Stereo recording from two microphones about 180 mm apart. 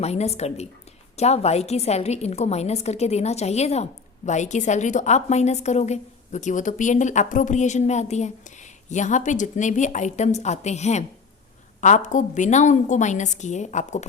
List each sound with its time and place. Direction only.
0.0 s a woman's voice: 35° left (ahead or behind)